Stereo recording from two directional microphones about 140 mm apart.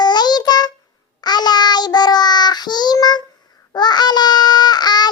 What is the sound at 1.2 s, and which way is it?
Child singing, 30° left (ahead or behind).